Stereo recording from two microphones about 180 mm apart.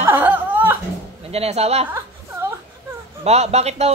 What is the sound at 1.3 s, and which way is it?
Speech, 35° right (ahead or behind).